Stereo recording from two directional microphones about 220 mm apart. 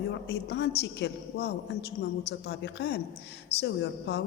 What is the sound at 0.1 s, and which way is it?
A man's voice, 50° left (ahead or behind).